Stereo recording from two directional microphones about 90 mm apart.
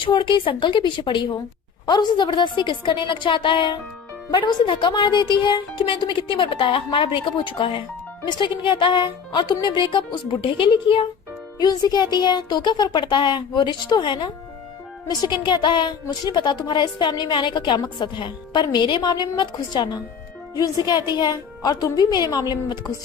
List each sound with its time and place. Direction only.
0.0 s speech: 60° left (ahead or behind)
11.6 s a woman's voice: 50° left (ahead or behind)